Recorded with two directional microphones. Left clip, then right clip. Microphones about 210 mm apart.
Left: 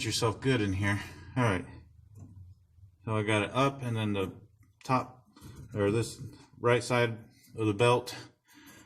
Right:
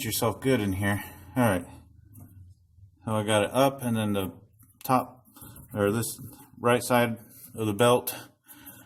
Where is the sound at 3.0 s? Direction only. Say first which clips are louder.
Right 5 dB; 40° right (ahead or behind).